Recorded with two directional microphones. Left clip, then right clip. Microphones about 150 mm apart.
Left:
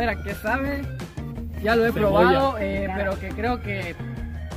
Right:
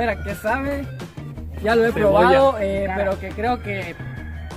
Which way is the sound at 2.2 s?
20° right (ahead or behind).